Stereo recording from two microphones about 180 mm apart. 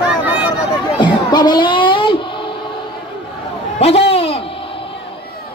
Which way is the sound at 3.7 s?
35° left (ahead or behind).